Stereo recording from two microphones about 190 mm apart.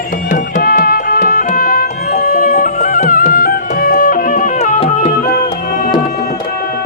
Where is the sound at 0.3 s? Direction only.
45° left (ahead or behind).